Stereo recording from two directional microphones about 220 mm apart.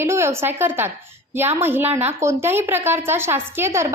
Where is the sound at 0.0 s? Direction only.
10° right (ahead or behind).